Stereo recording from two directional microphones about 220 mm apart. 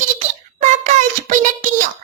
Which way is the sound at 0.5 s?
35° right (ahead or behind).